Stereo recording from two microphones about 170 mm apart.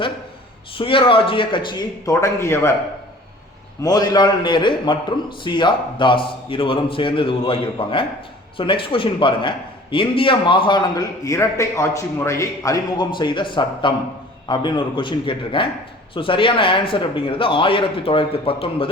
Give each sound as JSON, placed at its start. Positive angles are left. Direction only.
{"t": 0.8, "sound": "a man's voice", "side_deg": 30}
{"t": 3.8, "sound": "a man's voice", "side_deg": 25}